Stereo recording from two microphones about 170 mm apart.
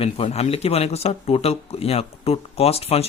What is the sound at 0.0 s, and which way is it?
Speech, 35° left (ahead or behind).